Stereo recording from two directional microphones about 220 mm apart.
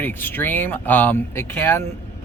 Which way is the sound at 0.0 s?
10° left (ahead or behind).